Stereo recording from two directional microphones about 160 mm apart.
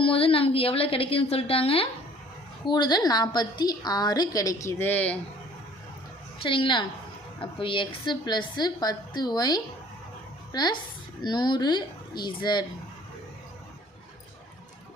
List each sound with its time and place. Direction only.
0.0 s a woman's voice: 35° left (ahead or behind); by 5.1 s 10° left (ahead or behind)
6.4 s a woman's voice: 30° left (ahead or behind)